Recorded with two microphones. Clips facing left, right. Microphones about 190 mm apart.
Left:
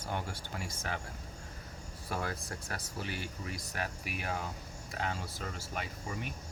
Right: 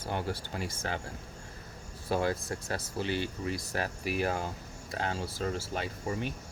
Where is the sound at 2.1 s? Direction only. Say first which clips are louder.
Right 8 dB; 30° right (ahead or behind).